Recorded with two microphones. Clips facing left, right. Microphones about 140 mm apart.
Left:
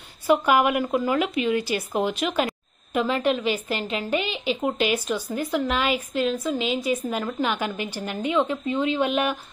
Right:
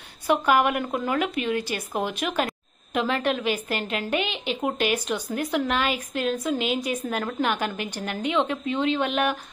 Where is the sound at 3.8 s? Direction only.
Centre (ahead or behind).